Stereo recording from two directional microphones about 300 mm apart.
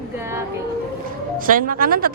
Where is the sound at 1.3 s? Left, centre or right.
Right.